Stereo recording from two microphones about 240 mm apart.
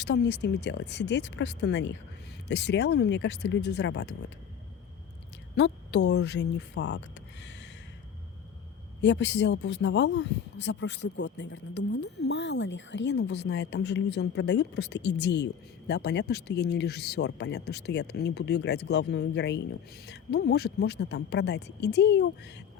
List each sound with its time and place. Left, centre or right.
0.0 s speech: left
5.5 s a woman's voice: left
9.0 s speech: left